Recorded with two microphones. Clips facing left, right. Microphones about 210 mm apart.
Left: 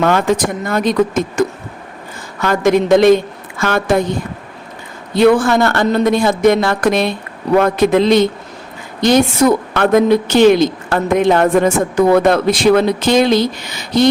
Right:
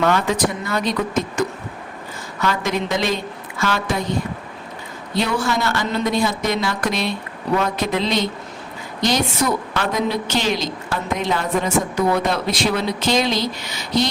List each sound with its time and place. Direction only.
0.0 s a woman's voice: 50° left (ahead or behind)
5.1 s a woman's voice: 55° left (ahead or behind)